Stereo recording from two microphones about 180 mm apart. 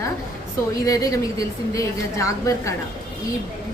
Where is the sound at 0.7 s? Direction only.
20° left (ahead or behind).